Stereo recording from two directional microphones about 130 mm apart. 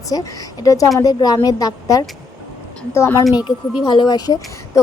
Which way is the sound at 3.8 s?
35° left (ahead or behind).